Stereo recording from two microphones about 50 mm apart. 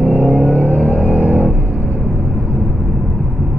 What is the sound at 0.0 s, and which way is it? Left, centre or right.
Vehicle, right.